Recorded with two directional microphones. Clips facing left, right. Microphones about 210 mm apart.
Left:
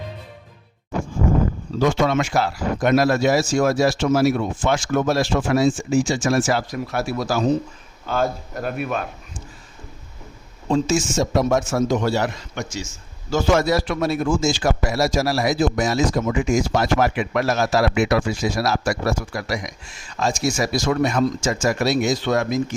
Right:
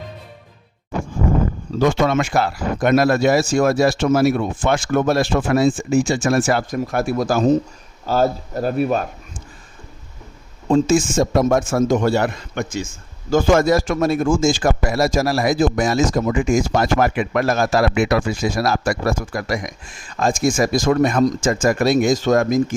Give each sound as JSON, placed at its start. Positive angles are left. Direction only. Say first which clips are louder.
{"t": 1.8, "sound": "speech", "louder": "right 2 dB", "side_deg": -55}
{"t": 8.0, "sound": "speech", "louder": "right 4 dB", "side_deg": -35}
{"t": 10.7, "sound": "a man's voice", "louder": "right 4 dB", "side_deg": -55}